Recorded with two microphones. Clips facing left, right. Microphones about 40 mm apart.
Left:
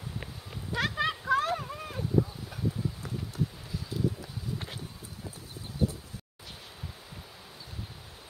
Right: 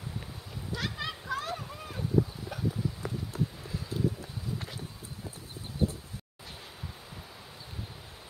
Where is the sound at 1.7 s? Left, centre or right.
Centre.